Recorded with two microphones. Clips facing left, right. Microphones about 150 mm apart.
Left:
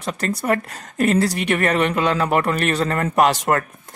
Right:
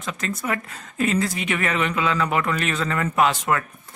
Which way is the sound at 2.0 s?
35° left (ahead or behind).